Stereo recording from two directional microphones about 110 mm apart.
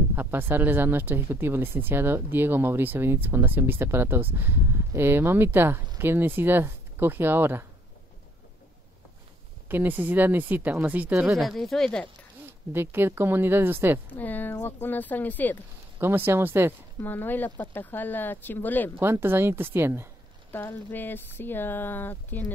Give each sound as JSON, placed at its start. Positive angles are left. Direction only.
{"t": 0.1, "sound": "speech", "side_deg": -20}
{"t": 9.7, "sound": "speech", "side_deg": -15}
{"t": 11.3, "sound": "speech", "side_deg": 0}
{"t": 12.7, "sound": "speech", "side_deg": -20}
{"t": 14.1, "sound": "speech", "side_deg": 15}
{"t": 16.0, "sound": "speech", "side_deg": -20}
{"t": 17.0, "sound": "speech", "side_deg": 20}
{"t": 18.9, "sound": "speech", "side_deg": -20}
{"t": 20.5, "sound": "speech", "side_deg": 20}